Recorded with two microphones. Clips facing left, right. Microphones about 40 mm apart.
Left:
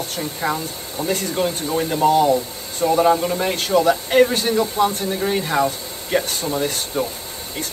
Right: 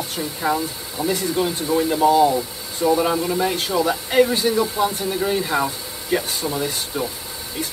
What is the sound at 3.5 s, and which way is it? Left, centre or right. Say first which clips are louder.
Speech: left 4 dB; left.